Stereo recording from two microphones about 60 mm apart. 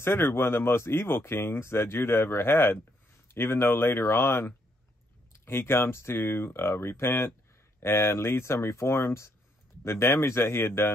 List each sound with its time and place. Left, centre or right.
0.0 s speech: left
7.8 s speech: left